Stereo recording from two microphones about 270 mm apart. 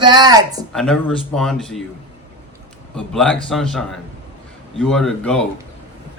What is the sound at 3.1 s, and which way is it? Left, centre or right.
Speech, centre.